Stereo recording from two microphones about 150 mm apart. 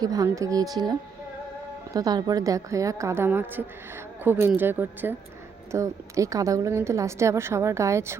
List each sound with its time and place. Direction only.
0.0 s a woman's voice: 25° right (ahead or behind)